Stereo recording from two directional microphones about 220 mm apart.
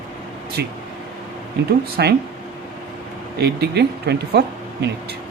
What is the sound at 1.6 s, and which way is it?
Speech, 50° right (ahead or behind).